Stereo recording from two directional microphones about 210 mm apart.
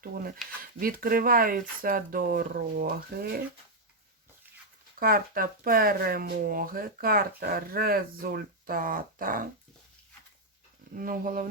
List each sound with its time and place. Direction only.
0.0 s speech: 45° right (ahead or behind)
4.9 s speech: 45° right (ahead or behind)
10.9 s speech: 40° right (ahead or behind)